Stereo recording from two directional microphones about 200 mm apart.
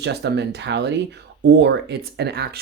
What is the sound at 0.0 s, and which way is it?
Speech, 55° right (ahead or behind).